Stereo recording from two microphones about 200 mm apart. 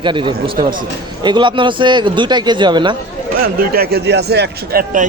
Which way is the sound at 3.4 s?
50° right (ahead or behind).